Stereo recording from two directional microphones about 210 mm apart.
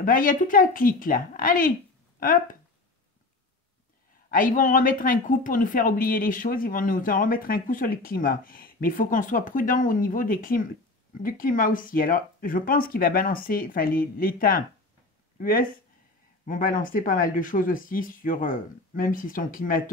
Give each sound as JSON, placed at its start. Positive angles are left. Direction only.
{"t": 0.0, "sound": "speech", "side_deg": 40}
{"t": 4.3, "sound": "speech", "side_deg": 40}